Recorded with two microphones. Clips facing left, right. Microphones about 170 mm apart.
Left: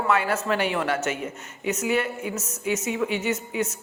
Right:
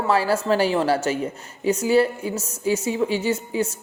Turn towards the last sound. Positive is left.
turn(degrees=-30)  # may be behind; listen again after turning